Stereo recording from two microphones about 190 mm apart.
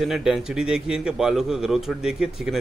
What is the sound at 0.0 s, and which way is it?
A man's voice, centre (ahead or behind).